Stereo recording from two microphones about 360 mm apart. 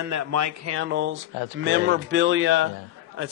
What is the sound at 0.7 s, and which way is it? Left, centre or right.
A man's voice, right.